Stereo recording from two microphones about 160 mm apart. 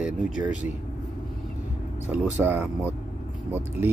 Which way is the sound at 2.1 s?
10° right (ahead or behind).